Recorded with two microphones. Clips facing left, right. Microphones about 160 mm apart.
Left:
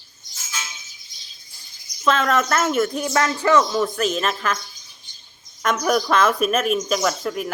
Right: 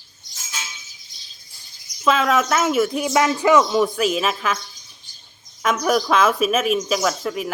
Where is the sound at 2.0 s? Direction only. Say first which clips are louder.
Right 1 dB; 5° right (ahead or behind).